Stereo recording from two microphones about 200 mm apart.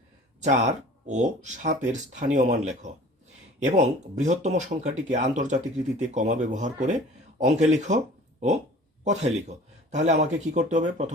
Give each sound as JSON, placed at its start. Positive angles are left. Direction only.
{"t": 0.4, "sound": "speech", "side_deg": -35}
{"t": 9.9, "sound": "speech", "side_deg": -35}